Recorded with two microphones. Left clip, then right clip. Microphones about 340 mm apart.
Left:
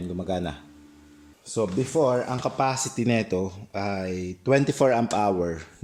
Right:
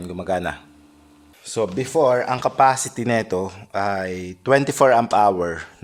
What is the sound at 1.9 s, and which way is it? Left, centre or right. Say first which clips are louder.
Speech: right 7 dB; right.